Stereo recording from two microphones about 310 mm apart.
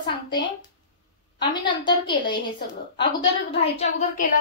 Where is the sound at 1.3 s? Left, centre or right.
Centre.